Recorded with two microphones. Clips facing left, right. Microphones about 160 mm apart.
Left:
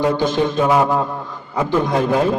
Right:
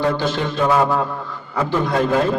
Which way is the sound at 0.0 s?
15° left (ahead or behind).